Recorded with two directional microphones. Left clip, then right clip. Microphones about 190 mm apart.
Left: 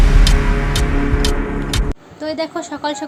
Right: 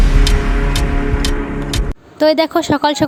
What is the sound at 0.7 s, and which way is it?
Music, centre (ahead or behind).